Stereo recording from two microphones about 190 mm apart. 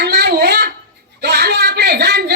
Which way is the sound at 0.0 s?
55° right (ahead or behind).